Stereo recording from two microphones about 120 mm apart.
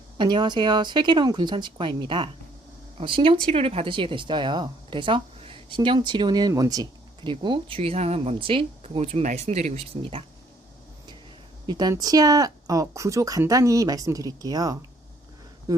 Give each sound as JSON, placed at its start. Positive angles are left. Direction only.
{"t": 0.2, "sound": "a woman's voice", "side_deg": -40}
{"t": 7.2, "sound": "speech", "side_deg": -45}
{"t": 11.6, "sound": "speech", "side_deg": -35}